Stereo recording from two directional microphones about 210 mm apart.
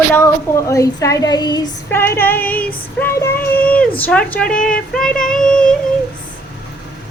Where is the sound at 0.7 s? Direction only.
15° left (ahead or behind).